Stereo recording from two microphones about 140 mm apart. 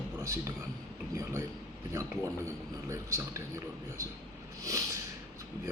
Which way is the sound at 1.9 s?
20° right (ahead or behind).